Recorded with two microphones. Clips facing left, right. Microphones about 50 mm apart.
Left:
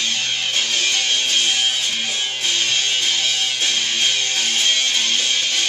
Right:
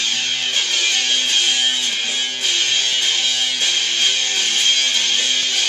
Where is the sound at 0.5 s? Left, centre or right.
Centre.